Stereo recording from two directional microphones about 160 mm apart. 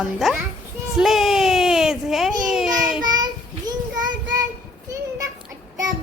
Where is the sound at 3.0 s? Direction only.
25° right (ahead or behind).